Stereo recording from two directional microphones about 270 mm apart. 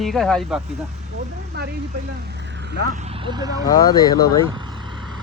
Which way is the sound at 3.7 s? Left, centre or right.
Centre.